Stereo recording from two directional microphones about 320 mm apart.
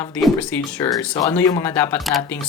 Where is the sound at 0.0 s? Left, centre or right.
Centre.